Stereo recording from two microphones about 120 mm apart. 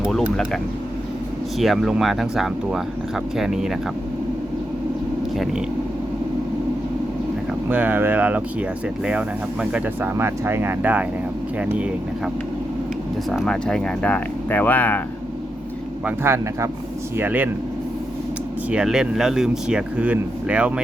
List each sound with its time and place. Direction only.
0.0 s speech: 5° left (ahead or behind)
7.7 s speech: 15° right (ahead or behind)
13.3 s speech: 5° left (ahead or behind)
16.0 s speech: 20° right (ahead or behind)
18.7 s speech: 5° right (ahead or behind)